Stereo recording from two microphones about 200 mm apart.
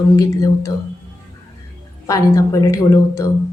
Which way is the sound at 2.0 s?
15° left (ahead or behind).